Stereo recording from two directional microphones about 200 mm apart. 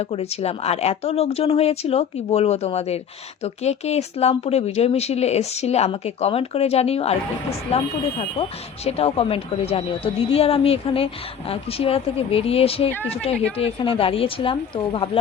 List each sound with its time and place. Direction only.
0.0 s speech: 30° left (ahead or behind)